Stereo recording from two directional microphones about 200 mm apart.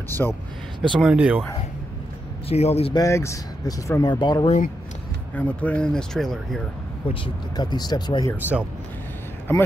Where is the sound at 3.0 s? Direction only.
15° left (ahead or behind).